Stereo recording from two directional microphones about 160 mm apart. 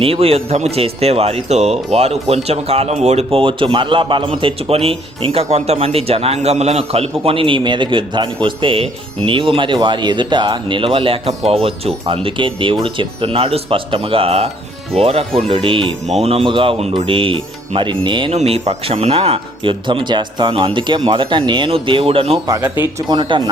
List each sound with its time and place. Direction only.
0.0 s speech: 40° right (ahead or behind)
18.3 s speech: 40° right (ahead or behind)
22.4 s speech: 20° right (ahead or behind)